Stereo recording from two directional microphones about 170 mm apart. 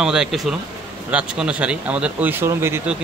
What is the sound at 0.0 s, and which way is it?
Speech, 5° right (ahead or behind).